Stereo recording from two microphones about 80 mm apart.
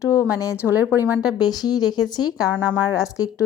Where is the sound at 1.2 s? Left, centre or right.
Left.